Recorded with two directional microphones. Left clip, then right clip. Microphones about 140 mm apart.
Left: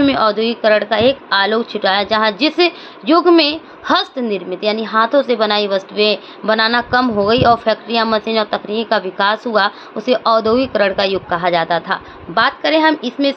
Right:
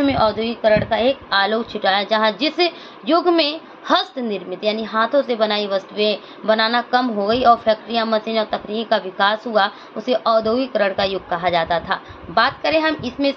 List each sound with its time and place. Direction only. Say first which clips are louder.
0.0 s a woman's voice: left 4 dB; 60° left (ahead or behind)